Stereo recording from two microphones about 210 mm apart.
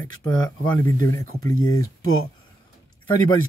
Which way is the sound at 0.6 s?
10° left (ahead or behind).